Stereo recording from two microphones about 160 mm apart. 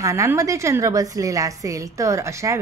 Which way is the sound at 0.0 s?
20° right (ahead or behind).